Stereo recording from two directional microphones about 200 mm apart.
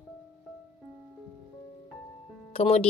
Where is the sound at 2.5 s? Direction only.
30° left (ahead or behind).